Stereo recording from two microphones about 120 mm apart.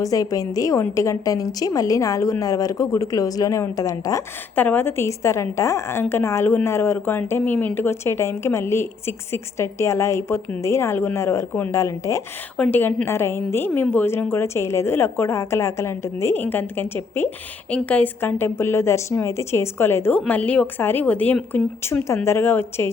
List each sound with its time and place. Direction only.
0.0 s a woman's voice: 30° left (ahead or behind)
4.5 s a woman's voice: 15° left (ahead or behind)
12.5 s a woman's voice: 10° left (ahead or behind)